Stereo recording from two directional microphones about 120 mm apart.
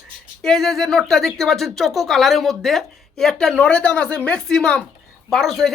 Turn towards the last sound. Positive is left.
turn(degrees=0)  # may be behind; listen again after turning